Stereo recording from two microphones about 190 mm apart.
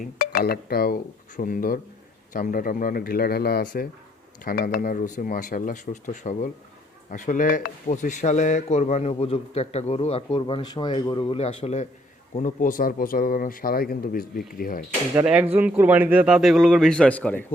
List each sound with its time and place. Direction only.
0.0 s speech: 55° left (ahead or behind)
14.8 s a man's voice: 10° right (ahead or behind); by 17.4 s 10° left (ahead or behind)